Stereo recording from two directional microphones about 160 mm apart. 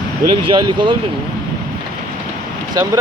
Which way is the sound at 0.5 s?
30° right (ahead or behind).